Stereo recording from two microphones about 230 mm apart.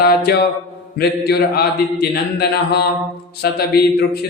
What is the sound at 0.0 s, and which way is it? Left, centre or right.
Mantra, left.